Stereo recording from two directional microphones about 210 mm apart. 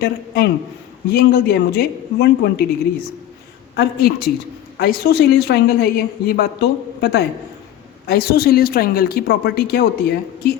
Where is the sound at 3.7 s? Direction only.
50° left (ahead or behind).